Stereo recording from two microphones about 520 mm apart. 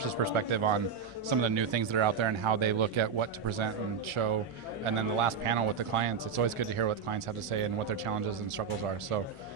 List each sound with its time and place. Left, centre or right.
0.2 s speech: right